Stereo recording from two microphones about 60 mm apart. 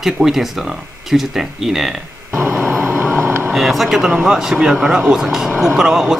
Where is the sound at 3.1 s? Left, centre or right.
Right.